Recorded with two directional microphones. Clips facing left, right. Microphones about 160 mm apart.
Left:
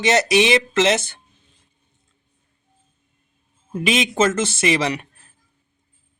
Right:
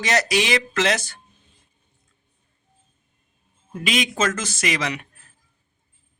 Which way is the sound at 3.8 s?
25° left (ahead or behind).